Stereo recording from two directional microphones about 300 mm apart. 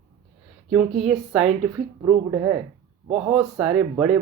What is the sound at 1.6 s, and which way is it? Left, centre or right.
Speech, centre.